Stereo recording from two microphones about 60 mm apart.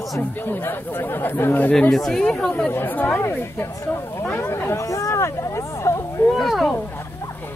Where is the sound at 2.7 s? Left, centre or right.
Left.